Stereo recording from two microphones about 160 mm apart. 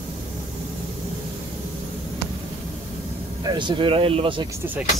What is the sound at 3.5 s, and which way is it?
Speech, 30° right (ahead or behind).